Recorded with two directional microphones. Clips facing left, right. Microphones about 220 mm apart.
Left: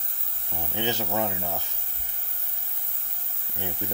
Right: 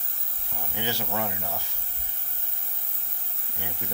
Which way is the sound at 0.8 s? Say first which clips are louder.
Left 3 dB; 20° left (ahead or behind).